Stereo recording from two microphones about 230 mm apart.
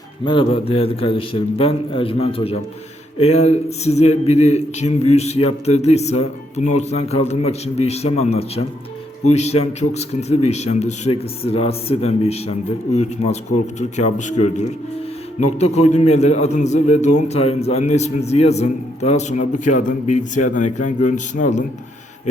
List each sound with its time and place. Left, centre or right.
0.3 s a man's voice: left